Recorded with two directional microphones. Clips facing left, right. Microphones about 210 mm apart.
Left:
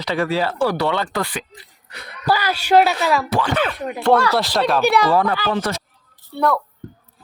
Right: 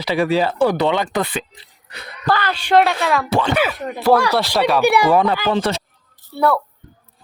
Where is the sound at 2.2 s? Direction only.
10° left (ahead or behind).